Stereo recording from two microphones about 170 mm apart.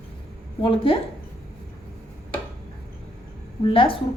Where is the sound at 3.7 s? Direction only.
30° left (ahead or behind).